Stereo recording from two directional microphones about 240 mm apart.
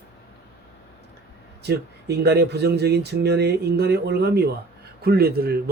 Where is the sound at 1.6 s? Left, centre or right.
Right.